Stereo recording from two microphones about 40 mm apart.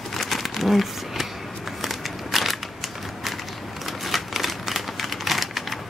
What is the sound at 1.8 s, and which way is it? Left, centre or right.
Walk, centre.